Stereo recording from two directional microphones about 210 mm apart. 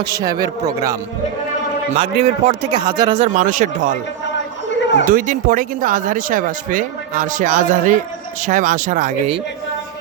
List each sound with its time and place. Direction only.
0.0 s a man's voice: 20° right (ahead or behind)
1.9 s speech: 30° right (ahead or behind)
2.8 s speech: 20° right (ahead or behind)
3.3 s speech: 40° right (ahead or behind)
5.0 s speech: 40° right (ahead or behind)